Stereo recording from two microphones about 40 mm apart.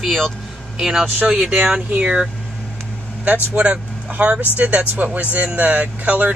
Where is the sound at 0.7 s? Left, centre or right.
Centre.